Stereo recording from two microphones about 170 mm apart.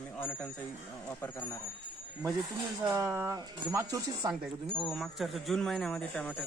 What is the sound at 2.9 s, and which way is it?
Speech, 15° right (ahead or behind).